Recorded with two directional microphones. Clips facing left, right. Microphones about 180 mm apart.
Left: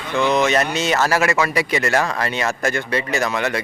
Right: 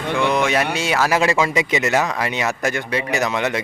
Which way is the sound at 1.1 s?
20° right (ahead or behind).